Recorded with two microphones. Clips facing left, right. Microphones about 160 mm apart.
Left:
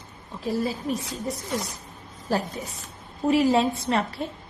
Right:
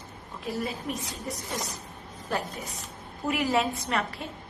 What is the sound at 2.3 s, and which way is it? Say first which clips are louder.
A woman's voice: left 5 dB; 35° left (ahead or behind).